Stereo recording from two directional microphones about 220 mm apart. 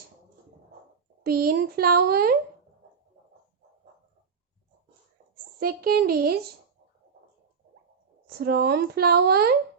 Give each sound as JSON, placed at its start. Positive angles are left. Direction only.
{"t": 1.2, "sound": "speech", "side_deg": -45}
{"t": 5.5, "sound": "speech", "side_deg": -45}
{"t": 8.3, "sound": "speech", "side_deg": -45}